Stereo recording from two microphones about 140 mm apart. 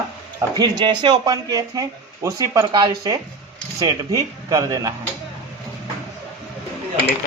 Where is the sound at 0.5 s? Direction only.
30° right (ahead or behind).